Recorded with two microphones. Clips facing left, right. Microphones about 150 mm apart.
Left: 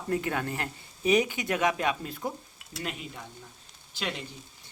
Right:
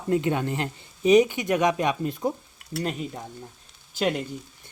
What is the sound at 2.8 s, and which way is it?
Speech, 40° right (ahead or behind).